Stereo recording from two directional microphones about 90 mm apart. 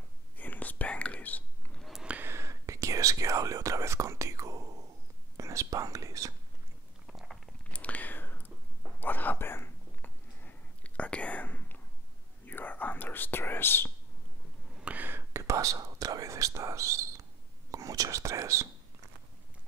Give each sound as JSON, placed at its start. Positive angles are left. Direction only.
{"t": 0.4, "sound": "whispering", "side_deg": 20}
{"t": 1.8, "sound": "a sound", "side_deg": -5}
{"t": 2.1, "sound": "whispering", "side_deg": -30}
{"t": 5.4, "sound": "speech", "side_deg": -35}
{"t": 7.1, "sound": "chewing", "side_deg": -5}
{"t": 7.7, "sound": "whispering", "side_deg": 15}
{"t": 14.8, "sound": "whispering", "side_deg": -15}